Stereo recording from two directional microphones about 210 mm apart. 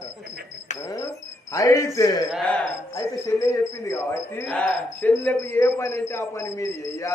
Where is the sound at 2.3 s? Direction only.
5° left (ahead or behind).